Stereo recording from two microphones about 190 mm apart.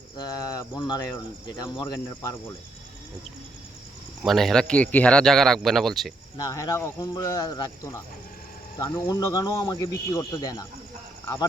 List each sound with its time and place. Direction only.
0.2 s a man's voice: 20° left (ahead or behind)
4.2 s speech: centre (ahead or behind)
6.3 s a man's voice: 15° left (ahead or behind)